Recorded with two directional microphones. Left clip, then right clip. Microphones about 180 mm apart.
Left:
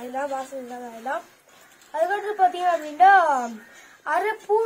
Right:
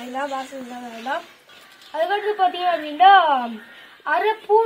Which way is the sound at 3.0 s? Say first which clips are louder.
Right 3 dB; 25° left (ahead or behind).